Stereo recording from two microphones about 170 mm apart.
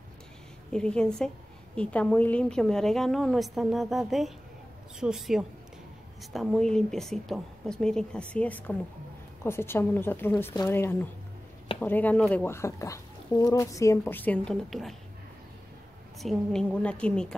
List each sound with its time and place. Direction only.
0.7 s a woman's voice: 5° left (ahead or behind)
16.2 s a woman's voice: centre (ahead or behind)